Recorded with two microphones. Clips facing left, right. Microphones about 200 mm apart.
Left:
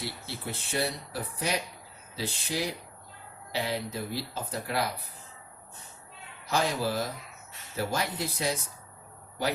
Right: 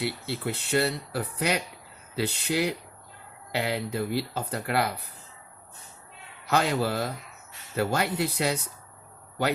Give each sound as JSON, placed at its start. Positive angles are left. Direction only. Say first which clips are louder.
{"t": 0.0, "sound": "speech", "louder": "right 7 dB", "side_deg": -65}
{"t": 6.4, "sound": "speech", "louder": "right 3 dB", "side_deg": -65}